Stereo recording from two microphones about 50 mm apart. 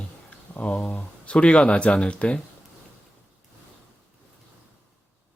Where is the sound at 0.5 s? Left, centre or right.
Left.